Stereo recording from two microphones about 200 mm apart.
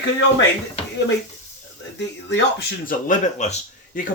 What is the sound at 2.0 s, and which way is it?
Speech, 65° left (ahead or behind).